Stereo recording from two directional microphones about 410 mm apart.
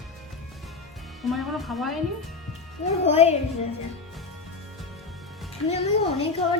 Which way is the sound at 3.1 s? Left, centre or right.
Centre.